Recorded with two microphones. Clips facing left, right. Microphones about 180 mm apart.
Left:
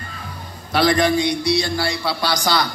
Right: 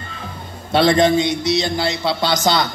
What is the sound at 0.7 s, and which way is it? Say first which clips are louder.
A man's voice: right 3 dB; 25° right (ahead or behind).